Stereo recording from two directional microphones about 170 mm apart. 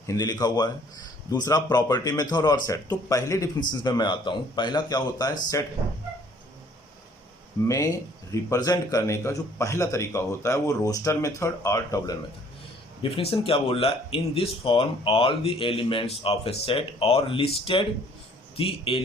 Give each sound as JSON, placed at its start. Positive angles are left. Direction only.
{"t": 0.1, "sound": "a man's voice", "side_deg": 20}
{"t": 7.7, "sound": "a man's voice", "side_deg": 20}
{"t": 13.0, "sound": "speech", "side_deg": 30}
{"t": 18.5, "sound": "speech", "side_deg": 30}